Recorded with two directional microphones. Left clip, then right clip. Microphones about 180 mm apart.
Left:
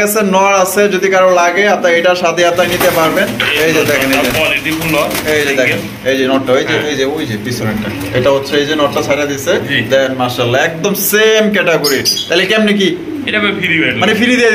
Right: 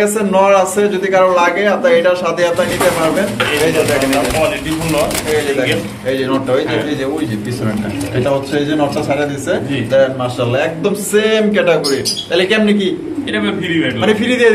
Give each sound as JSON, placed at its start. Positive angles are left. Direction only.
{"t": 0.0, "sound": "a man's voice", "side_deg": 25}
{"t": 5.6, "sound": "a man's voice", "side_deg": 30}
{"t": 9.1, "sound": "a man's voice", "side_deg": 30}
{"t": 14.0, "sound": "a man's voice", "side_deg": 25}